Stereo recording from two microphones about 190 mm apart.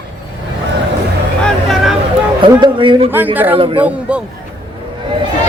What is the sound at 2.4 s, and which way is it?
Speech, 25° right (ahead or behind).